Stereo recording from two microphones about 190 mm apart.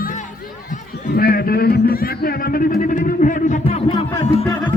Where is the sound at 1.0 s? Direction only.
50° left (ahead or behind).